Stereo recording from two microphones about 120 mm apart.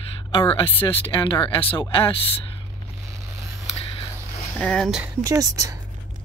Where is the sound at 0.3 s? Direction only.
50° left (ahead or behind).